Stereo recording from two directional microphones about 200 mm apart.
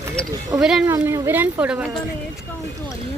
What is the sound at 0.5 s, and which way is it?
A woman's voice, 5° right (ahead or behind).